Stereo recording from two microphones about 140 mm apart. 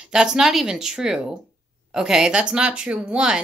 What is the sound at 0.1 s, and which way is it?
Speech, 5° right (ahead or behind).